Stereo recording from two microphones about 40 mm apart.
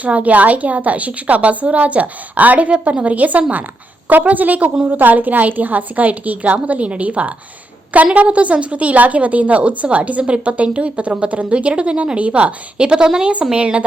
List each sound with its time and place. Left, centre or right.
0.0 s a woman's voice: right